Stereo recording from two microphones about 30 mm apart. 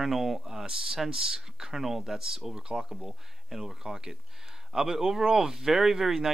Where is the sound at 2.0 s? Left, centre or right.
Centre.